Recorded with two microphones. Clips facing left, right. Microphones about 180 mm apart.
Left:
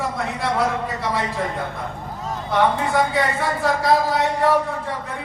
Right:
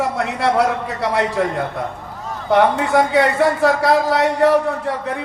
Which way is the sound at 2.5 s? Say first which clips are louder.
Right 5 dB; 70° right (ahead or behind).